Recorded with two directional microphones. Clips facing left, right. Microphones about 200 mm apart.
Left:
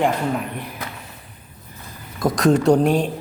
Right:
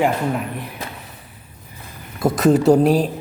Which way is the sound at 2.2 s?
5° right (ahead or behind).